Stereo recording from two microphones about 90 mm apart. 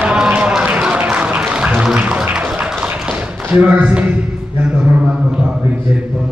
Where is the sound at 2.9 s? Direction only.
5° right (ahead or behind).